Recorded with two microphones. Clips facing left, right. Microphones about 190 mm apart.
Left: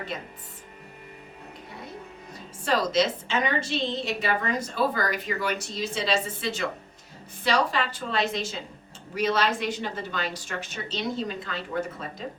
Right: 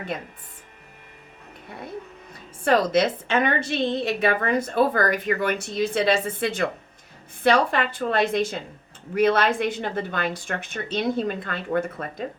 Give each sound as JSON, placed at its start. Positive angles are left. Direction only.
{"t": 2.6, "sound": "a woman's voice", "side_deg": -55}